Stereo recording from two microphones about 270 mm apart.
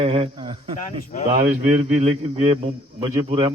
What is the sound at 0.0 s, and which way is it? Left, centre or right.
A man's voice, right.